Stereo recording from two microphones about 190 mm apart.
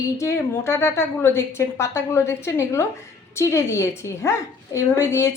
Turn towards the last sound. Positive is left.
turn(degrees=15)  # may be behind; listen again after turning